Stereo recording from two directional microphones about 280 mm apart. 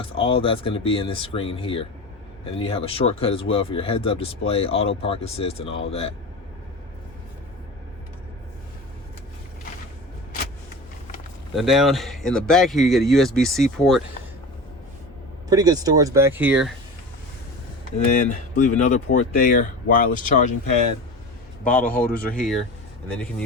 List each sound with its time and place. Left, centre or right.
0.0 s speech: centre
11.5 s speech: centre
15.4 s speech: centre
18.3 s speech: left
21.7 s speech: centre